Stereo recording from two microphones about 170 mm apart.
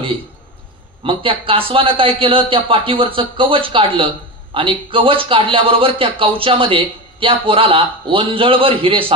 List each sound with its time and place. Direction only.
1.0 s speech: 30° right (ahead or behind)